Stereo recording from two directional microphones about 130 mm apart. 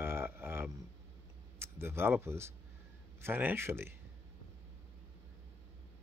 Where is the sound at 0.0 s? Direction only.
15° right (ahead or behind).